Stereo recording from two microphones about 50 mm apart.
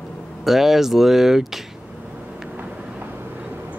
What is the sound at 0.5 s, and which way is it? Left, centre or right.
Speech, centre.